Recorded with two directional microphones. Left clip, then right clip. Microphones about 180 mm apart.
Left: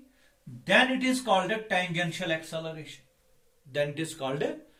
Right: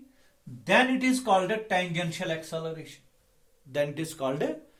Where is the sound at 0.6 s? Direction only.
30° right (ahead or behind).